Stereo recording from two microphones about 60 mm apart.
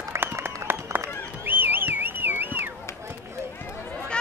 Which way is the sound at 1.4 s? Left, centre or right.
Right.